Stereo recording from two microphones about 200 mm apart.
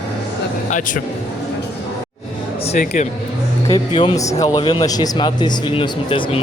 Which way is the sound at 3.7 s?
20° left (ahead or behind).